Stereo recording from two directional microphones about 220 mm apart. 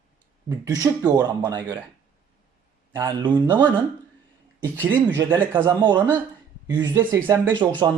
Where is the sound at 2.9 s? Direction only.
20° right (ahead or behind).